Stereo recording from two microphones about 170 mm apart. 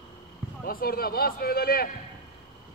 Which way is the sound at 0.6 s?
60° left (ahead or behind).